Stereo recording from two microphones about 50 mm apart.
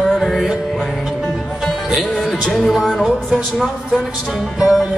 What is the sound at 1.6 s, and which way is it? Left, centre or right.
Music, centre.